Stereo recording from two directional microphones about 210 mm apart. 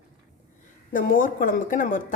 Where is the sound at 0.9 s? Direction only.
40° left (ahead or behind).